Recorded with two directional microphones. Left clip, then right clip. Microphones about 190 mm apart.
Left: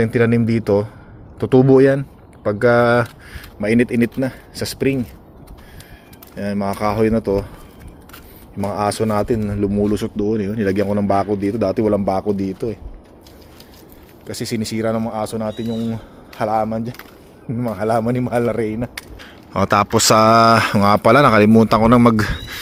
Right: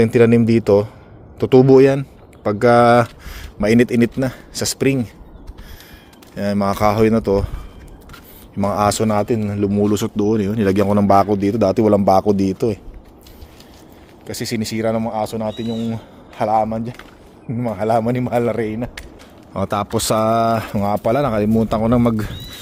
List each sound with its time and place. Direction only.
0.0 s speech: 20° right (ahead or behind)
6.3 s speech: 25° right (ahead or behind)
8.5 s speech: 20° right (ahead or behind); by 12.8 s 40° right (ahead or behind)
14.3 s speech: 15° right (ahead or behind)
19.5 s speech: centre (ahead or behind)